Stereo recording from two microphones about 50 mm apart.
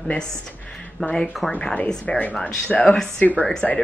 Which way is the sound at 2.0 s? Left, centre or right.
Left.